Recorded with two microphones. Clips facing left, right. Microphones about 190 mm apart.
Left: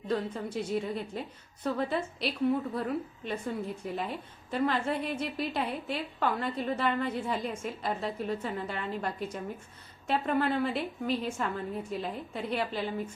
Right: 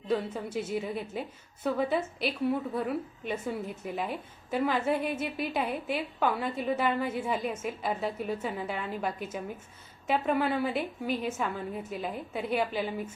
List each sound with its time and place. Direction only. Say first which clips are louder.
0.1 s a woman's voice: right 1 dB; 5° right (ahead or behind)